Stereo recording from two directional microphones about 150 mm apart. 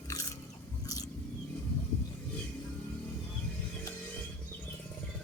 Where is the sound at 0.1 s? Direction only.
20° left (ahead or behind).